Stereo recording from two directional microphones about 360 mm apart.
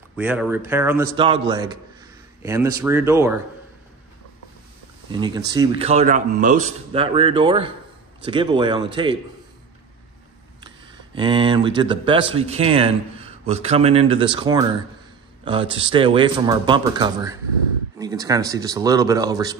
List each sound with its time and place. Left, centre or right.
0.1 s speech: centre
5.1 s speech: centre
11.1 s speech: centre